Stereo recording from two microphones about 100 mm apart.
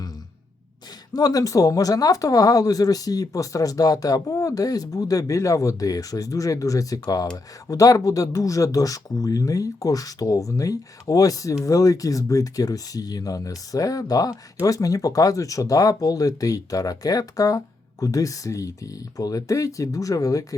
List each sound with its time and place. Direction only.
1.1 s speech: 40° left (ahead or behind)